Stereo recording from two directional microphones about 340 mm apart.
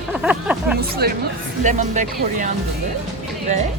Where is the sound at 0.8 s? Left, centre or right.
Right.